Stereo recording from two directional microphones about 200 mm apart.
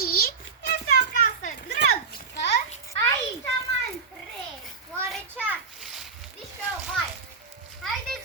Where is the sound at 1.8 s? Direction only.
60° left (ahead or behind).